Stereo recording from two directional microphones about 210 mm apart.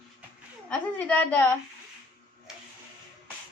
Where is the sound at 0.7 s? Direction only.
5° left (ahead or behind).